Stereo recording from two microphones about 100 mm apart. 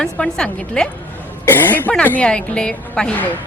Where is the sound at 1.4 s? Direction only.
20° left (ahead or behind).